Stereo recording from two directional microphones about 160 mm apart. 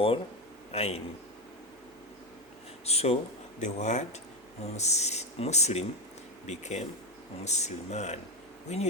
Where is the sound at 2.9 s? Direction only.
40° left (ahead or behind).